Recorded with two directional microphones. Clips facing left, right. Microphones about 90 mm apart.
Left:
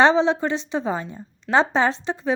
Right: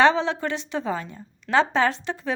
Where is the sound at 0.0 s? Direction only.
20° left (ahead or behind).